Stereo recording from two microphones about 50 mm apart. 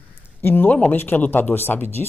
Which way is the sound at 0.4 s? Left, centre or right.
Left.